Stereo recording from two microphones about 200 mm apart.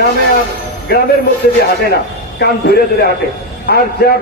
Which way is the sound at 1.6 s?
50° left (ahead or behind).